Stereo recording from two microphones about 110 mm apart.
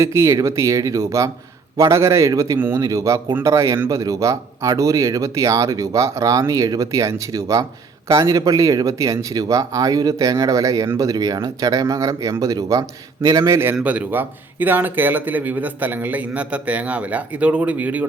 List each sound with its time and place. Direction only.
0.0 s speech: 25° right (ahead or behind)
2.6 s speech: 20° right (ahead or behind)
2.8 s speech: 30° right (ahead or behind)
13.7 s speech: 10° right (ahead or behind)